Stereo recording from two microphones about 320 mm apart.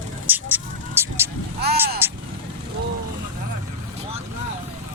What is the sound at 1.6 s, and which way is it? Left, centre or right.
Vehicle, right.